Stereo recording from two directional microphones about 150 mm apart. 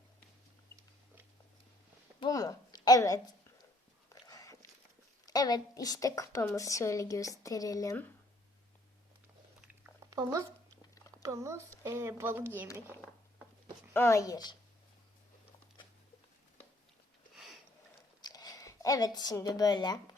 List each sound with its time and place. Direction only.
2.2 s a sound: 25° left (ahead or behind)
5.2 s speech: 25° left (ahead or behind)
10.1 s speech: 20° right (ahead or behind)
13.9 s speech: 20° left (ahead or behind)
17.3 s a sound: centre (ahead or behind)
18.2 s a woman's voice: 25° left (ahead or behind)